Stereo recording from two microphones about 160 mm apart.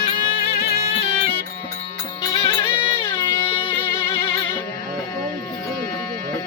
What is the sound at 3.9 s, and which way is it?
Music, 15° left (ahead or behind).